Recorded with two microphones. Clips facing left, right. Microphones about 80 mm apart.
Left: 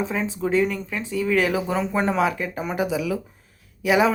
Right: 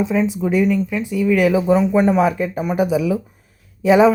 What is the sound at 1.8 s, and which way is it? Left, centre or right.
Speech, centre.